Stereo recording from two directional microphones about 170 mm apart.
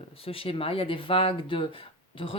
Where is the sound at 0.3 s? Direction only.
35° left (ahead or behind).